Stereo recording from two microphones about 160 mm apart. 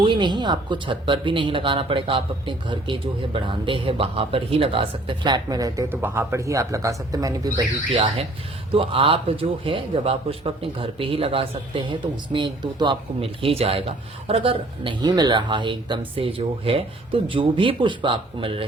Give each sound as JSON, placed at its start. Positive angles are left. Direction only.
{"t": 0.0, "sound": "speech", "side_deg": -30}
{"t": 8.0, "sound": "speech", "side_deg": -40}